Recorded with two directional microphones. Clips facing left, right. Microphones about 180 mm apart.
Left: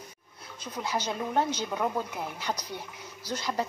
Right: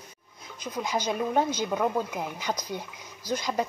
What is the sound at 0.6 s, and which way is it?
Speech, 15° right (ahead or behind).